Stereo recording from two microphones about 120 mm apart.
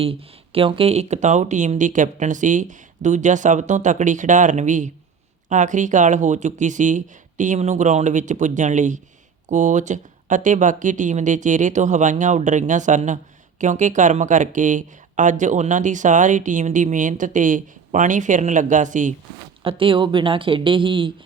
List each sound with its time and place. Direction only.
0.0 s speech: 50° right (ahead or behind); by 19.1 s 90° right
19.6 s speech: 45° right (ahead or behind)